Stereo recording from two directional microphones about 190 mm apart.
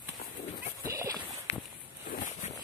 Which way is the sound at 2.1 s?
40° left (ahead or behind).